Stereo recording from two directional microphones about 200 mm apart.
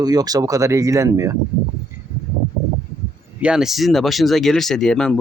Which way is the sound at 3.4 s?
5° right (ahead or behind).